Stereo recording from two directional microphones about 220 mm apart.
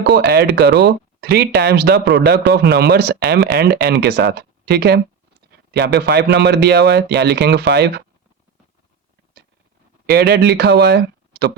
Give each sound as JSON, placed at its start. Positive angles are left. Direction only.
{"t": 0.1, "sound": "speech", "side_deg": -45}
{"t": 10.1, "sound": "speech", "side_deg": -45}